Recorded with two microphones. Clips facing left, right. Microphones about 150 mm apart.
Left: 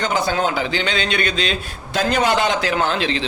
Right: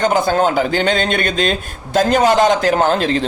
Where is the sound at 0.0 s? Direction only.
50° right (ahead or behind).